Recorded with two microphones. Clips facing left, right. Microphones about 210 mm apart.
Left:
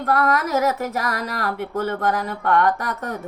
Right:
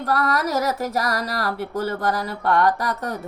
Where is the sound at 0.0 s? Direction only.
35° right (ahead or behind).